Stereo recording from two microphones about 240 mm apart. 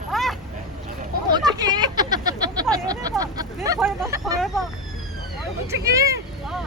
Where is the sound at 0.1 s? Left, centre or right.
Centre.